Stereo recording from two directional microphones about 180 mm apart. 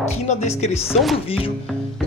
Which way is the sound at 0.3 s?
40° left (ahead or behind).